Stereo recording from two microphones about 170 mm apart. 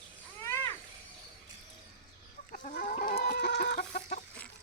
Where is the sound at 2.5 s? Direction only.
50° left (ahead or behind).